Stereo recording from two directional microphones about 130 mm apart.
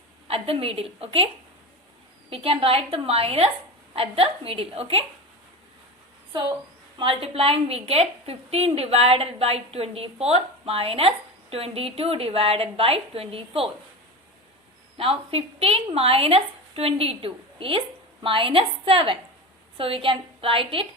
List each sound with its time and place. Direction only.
0.3 s a woman's voice: 45° right (ahead or behind)
2.3 s a woman's voice: 45° right (ahead or behind)
7.0 s a woman's voice: 45° right (ahead or behind)
14.9 s a woman's voice: 45° right (ahead or behind)